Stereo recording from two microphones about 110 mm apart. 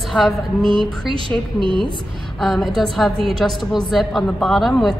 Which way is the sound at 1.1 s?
50° right (ahead or behind).